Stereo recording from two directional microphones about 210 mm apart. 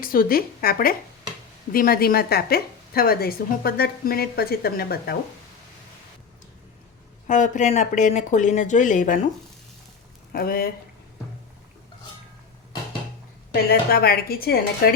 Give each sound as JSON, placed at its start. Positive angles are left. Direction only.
{"t": 0.0, "sound": "a woman's voice", "side_deg": 45}
{"t": 7.3, "sound": "speech", "side_deg": 35}
{"t": 10.3, "sound": "a woman's voice", "side_deg": 45}
{"t": 13.5, "sound": "a woman's voice", "side_deg": 50}